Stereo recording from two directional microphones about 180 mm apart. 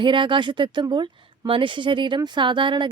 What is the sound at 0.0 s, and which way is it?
Speech, 25° right (ahead or behind).